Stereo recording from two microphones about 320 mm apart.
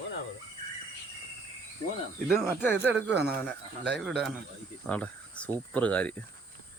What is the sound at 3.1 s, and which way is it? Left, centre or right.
Speech, right.